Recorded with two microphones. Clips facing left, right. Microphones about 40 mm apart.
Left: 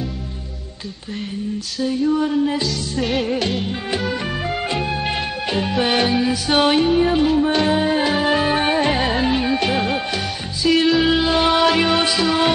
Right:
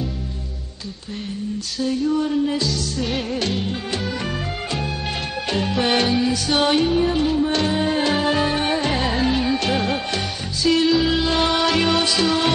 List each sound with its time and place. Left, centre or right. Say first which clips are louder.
1.8 s music: left 2 dB; centre